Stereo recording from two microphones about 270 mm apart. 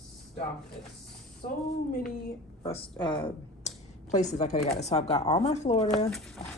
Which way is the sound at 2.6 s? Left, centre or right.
Centre.